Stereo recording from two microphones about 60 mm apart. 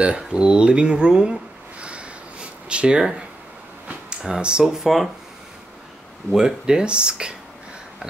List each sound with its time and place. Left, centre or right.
0.0 s a sound: centre
4.6 s speech: centre
6.3 s speech: centre